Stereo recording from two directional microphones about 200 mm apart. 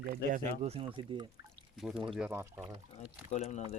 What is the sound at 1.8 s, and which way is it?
Speech, centre (ahead or behind).